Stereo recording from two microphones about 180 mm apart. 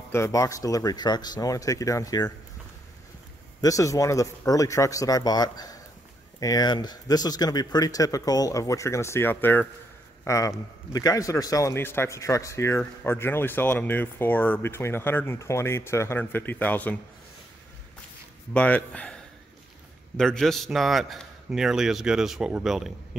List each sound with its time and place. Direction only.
0.1 s speech: 15° left (ahead or behind)
3.6 s a man's voice: 20° left (ahead or behind)
18.5 s a man's voice: 10° left (ahead or behind)
20.2 s a man's voice: 5° left (ahead or behind)